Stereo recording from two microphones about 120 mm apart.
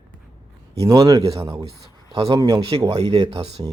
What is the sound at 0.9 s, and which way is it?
Speech, 30° right (ahead or behind).